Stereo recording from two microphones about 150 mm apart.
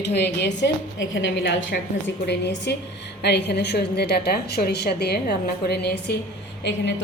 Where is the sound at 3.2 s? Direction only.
90° left.